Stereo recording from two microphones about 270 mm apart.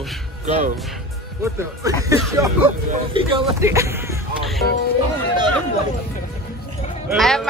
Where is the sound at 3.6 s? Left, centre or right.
Centre.